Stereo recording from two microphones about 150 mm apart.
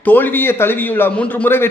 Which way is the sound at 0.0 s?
10° left (ahead or behind).